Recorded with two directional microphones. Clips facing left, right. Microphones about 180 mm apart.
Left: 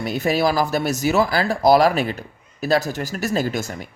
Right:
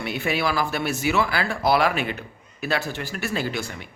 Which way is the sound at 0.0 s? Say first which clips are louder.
Left 5 dB; 40° left (ahead or behind).